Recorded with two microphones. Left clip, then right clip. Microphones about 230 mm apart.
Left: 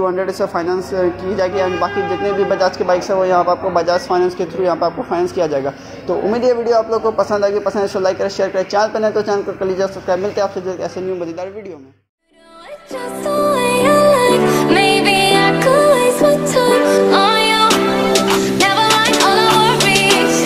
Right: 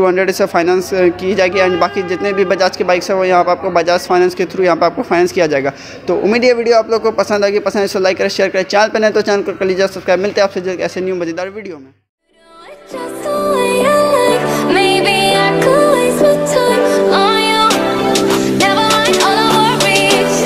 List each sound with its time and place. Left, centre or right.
0.0 s a man's voice: right
13.2 s music: centre